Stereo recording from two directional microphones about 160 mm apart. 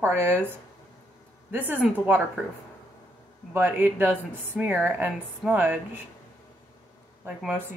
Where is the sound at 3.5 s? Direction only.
15° right (ahead or behind).